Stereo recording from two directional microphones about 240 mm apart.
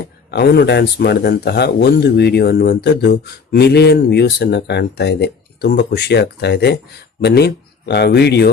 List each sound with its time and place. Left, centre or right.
0.3 s speech: left